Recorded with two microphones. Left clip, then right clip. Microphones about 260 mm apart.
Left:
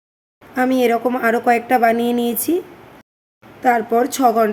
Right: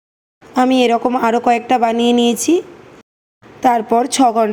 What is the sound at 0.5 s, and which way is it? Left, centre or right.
A woman's voice, centre.